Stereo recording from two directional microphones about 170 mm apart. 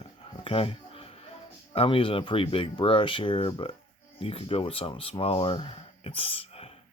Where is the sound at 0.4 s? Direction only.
30° left (ahead or behind).